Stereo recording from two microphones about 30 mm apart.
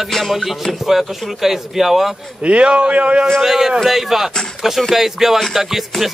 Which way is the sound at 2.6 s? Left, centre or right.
Right.